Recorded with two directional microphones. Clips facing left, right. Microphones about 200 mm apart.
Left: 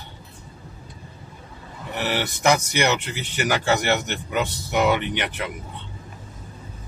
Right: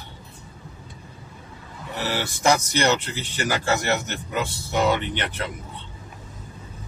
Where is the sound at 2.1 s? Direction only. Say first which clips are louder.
Left 1 dB; 15° left (ahead or behind).